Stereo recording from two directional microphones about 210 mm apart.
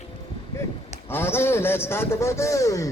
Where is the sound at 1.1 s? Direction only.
10° left (ahead or behind).